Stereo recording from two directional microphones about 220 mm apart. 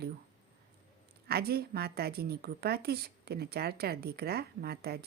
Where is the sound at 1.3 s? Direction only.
45° right (ahead or behind).